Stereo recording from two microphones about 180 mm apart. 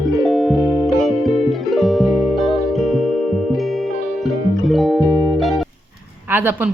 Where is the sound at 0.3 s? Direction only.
Centre (ahead or behind).